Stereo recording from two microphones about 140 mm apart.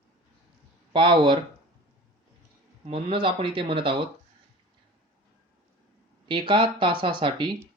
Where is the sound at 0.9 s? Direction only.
35° right (ahead or behind).